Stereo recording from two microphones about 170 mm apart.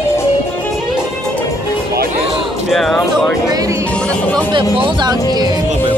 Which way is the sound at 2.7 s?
Centre (ahead or behind).